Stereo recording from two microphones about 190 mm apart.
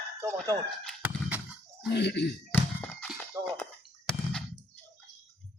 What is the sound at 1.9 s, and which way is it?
Speech, 60° left (ahead or behind).